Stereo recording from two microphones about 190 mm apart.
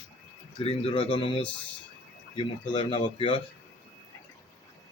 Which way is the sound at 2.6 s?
25° left (ahead or behind).